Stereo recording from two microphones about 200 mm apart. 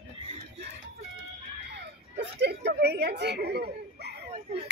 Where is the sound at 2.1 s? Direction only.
55° right (ahead or behind).